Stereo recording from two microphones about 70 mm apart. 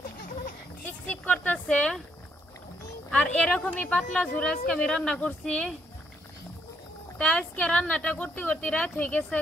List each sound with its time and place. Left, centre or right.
0.8 s a sound: left
1.8 s speech: centre
3.1 s a woman's voice: centre
7.2 s speech: centre